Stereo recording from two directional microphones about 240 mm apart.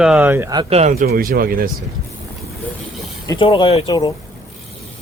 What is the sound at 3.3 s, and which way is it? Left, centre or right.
Speech, left.